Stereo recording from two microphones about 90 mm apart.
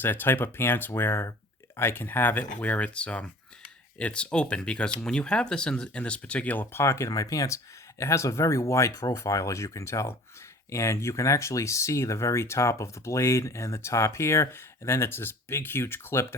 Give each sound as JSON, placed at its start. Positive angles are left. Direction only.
{"t": 0.0, "sound": "speech", "side_deg": 25}
{"t": 7.1, "sound": "speech", "side_deg": 40}